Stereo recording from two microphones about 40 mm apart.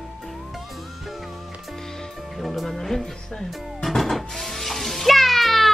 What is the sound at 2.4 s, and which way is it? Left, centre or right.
Music, centre.